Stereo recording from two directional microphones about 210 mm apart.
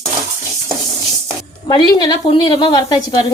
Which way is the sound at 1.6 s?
20° left (ahead or behind).